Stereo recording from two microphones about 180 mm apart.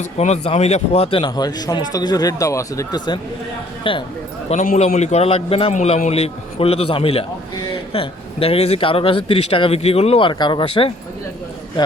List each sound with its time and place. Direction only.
0.0 s speech: 40° left (ahead or behind)
4.4 s a man's voice: 45° left (ahead or behind)